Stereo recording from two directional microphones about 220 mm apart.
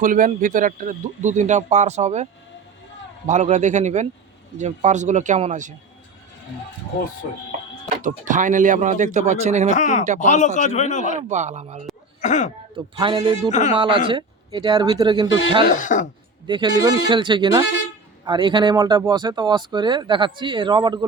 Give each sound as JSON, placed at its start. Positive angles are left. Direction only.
{"t": 0.0, "sound": "speech", "side_deg": -35}
{"t": 3.2, "sound": "speech", "side_deg": -35}
{"t": 8.0, "sound": "speech", "side_deg": -35}
{"t": 9.6, "sound": "a man's voice", "side_deg": 35}
{"t": 11.0, "sound": "speech", "side_deg": -35}
{"t": 12.2, "sound": "a man's voice", "side_deg": 35}
{"t": 12.7, "sound": "speech", "side_deg": -25}
{"t": 13.5, "sound": "a man's voice", "side_deg": 35}
{"t": 13.7, "sound": "speech", "side_deg": -25}
{"t": 15.7, "sound": "a man's voice", "side_deg": 35}
{"t": 16.5, "sound": "speech", "side_deg": -20}